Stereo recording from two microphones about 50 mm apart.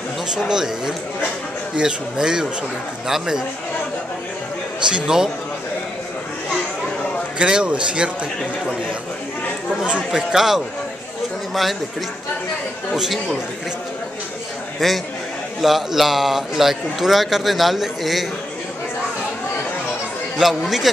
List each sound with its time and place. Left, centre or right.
0.3 s speech: centre
4.8 s speech: centre
7.3 s speech: centre
9.8 s speech: centre
10.3 s speech: centre
12.9 s speech: centre
14.8 s a man's voice: centre
20.3 s a man's voice: centre